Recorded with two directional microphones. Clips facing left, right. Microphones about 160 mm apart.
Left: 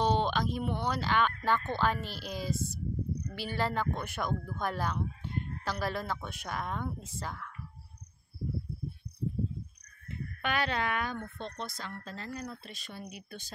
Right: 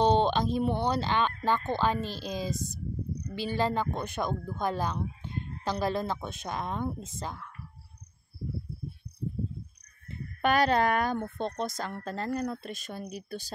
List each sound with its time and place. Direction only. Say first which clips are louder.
0.0 s speech: right 5 dB; 25° right (ahead or behind)
10.0 s speech: right 7 dB; 40° right (ahead or behind)